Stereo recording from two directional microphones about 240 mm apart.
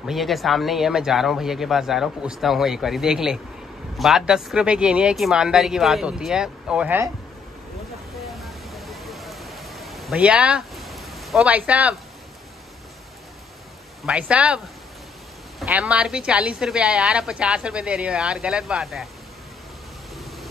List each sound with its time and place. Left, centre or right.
0.0 s a woman's voice: centre
8.3 s a sound: centre
14.0 s a woman's voice: centre
15.6 s a woman's voice: centre